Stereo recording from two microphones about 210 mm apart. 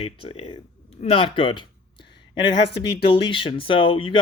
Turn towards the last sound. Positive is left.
turn(degrees=25)  # may be behind; listen again after turning